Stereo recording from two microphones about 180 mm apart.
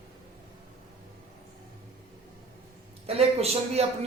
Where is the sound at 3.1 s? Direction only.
35° right (ahead or behind).